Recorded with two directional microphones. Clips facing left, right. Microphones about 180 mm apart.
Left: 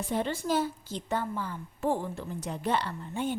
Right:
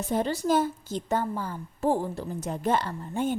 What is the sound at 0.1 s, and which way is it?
A woman's voice, 40° right (ahead or behind).